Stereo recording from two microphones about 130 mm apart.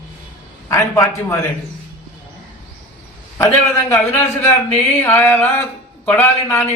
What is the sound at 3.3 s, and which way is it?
A man's voice, 20° left (ahead or behind).